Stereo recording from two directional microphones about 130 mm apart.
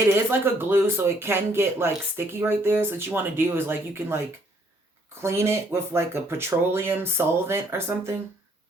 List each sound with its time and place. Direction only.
0.1 s speech: 15° right (ahead or behind)
5.2 s speech: 20° right (ahead or behind)